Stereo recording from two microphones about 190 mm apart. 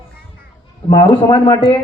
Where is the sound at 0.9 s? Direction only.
25° left (ahead or behind).